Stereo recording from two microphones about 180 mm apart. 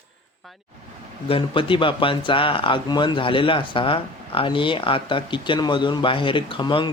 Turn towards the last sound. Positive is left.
turn(degrees=25)  # may be behind; listen again after turning